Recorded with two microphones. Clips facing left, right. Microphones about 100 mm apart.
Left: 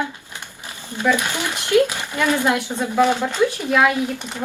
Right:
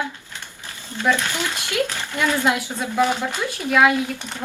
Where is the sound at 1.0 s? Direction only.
15° left (ahead or behind).